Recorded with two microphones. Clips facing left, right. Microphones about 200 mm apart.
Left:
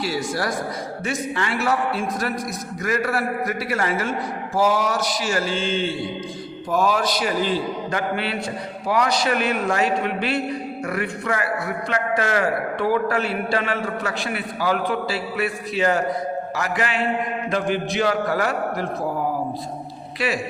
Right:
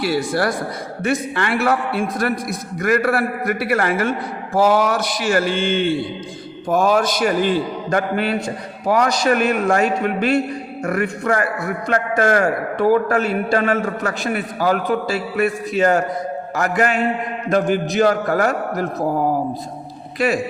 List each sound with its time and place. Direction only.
0.0 s a man's voice: 60° right (ahead or behind)
20.1 s a man's voice: 45° right (ahead or behind)